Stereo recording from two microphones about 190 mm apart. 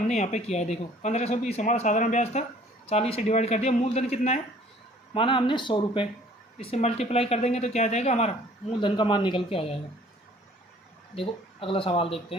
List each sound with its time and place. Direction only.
0.1 s speech: 35° left (ahead or behind)
11.1 s speech: 30° left (ahead or behind)